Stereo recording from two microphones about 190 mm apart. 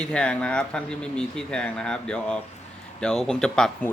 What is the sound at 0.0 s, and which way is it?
Speech, 5° left (ahead or behind).